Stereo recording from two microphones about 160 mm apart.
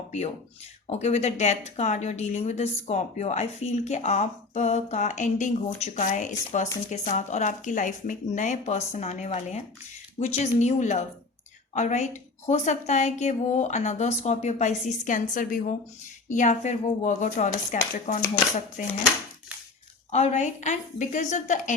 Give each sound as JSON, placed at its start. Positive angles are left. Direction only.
{"t": 0.9, "sound": "a woman's voice", "side_deg": 45}
{"t": 20.1, "sound": "a woman's voice", "side_deg": 45}